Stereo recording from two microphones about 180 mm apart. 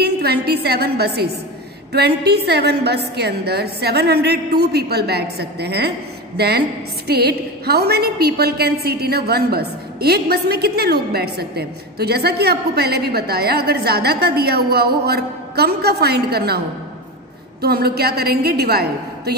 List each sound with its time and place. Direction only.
0.0 s a woman's voice: 60° right (ahead or behind)